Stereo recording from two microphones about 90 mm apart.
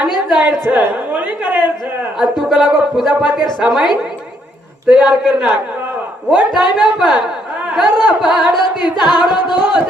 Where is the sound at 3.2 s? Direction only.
55° left (ahead or behind).